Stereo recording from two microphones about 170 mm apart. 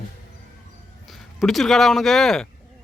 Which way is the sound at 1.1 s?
Centre (ahead or behind).